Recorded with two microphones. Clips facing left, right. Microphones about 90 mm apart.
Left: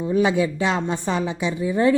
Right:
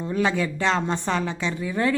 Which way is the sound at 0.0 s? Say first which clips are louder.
Left 4 dB; 15° left (ahead or behind).